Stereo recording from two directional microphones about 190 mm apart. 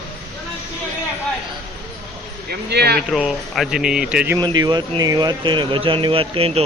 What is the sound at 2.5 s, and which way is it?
Speech, 60° right (ahead or behind).